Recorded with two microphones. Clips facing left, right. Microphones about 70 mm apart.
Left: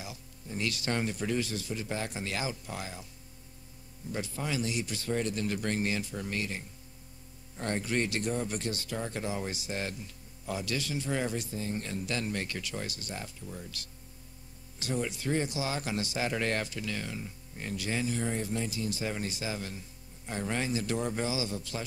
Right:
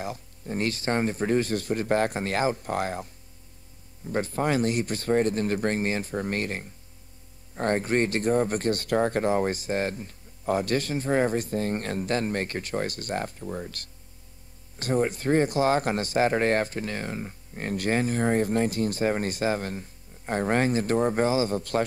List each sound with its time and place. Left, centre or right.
0.0 s speech: right
4.1 s speech: right